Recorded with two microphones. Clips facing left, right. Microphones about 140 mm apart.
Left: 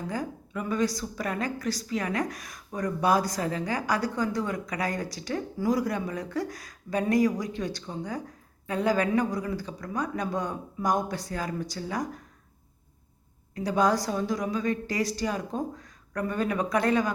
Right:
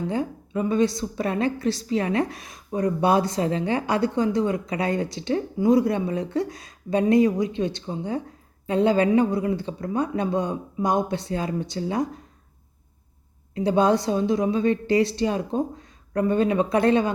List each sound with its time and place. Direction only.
0.1 s a woman's voice: 25° right (ahead or behind)
13.5 s a woman's voice: 25° right (ahead or behind)